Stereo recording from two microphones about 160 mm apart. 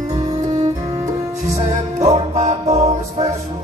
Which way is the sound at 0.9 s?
20° right (ahead or behind).